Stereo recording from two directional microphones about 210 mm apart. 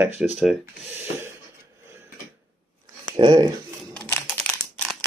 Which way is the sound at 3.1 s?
20° right (ahead or behind).